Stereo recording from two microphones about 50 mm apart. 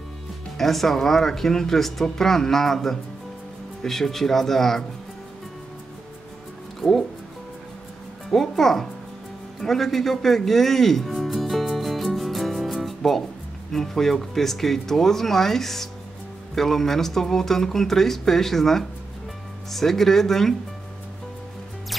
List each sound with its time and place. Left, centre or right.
0.6 s speech: centre
6.8 s speech: centre
8.3 s speech: centre
9.6 s music: centre
13.7 s speech: centre